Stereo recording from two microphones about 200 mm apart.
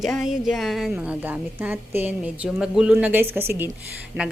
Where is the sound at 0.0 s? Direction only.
Centre (ahead or behind).